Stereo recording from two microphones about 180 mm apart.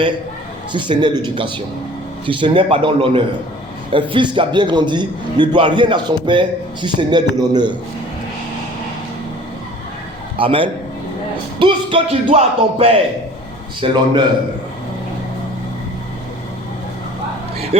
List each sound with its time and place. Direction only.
0.7 s a man's voice: 25° right (ahead or behind)
10.3 s a man's voice: 30° right (ahead or behind)